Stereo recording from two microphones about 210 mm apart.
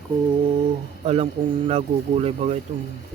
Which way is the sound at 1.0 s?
30° right (ahead or behind).